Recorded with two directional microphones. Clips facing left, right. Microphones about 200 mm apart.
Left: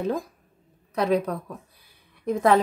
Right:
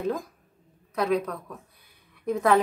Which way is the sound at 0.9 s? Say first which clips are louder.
Left 2 dB; 35° left (ahead or behind).